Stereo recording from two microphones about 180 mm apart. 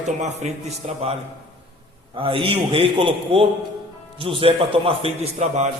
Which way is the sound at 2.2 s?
30° right (ahead or behind).